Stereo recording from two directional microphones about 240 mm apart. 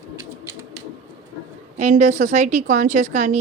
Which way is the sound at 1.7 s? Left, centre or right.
Right.